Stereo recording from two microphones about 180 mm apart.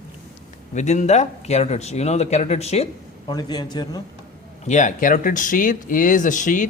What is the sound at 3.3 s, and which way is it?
Speech, 20° left (ahead or behind).